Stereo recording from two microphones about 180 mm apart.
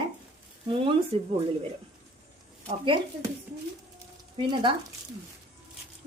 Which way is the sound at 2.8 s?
25° right (ahead or behind).